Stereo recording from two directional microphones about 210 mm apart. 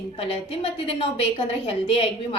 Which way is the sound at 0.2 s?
25° left (ahead or behind).